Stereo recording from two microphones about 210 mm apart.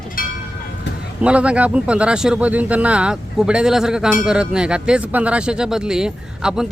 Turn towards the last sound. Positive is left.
turn(degrees=-5)  # may be behind; listen again after turning